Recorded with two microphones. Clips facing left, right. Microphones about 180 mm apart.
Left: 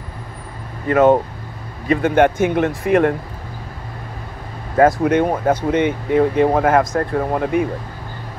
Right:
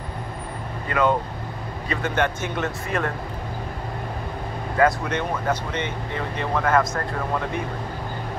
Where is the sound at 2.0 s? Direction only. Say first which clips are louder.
Left 9 dB; 55° left (ahead or behind).